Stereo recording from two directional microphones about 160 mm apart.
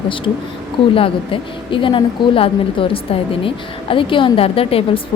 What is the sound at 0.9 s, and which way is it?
Speech, 35° left (ahead or behind).